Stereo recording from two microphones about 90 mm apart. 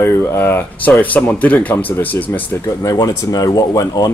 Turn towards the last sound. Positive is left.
turn(degrees=40)  # may be behind; listen again after turning